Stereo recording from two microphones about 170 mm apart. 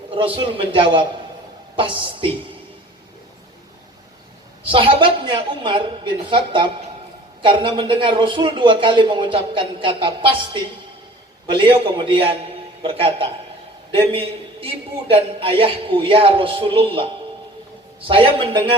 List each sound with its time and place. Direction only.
0.1 s a man's voice: 30° right (ahead or behind)
4.6 s a man's voice: 30° right (ahead or behind)
18.1 s a man's voice: 30° right (ahead or behind)